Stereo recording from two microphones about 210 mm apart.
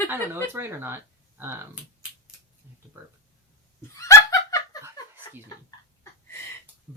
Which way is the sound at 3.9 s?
15° left (ahead or behind).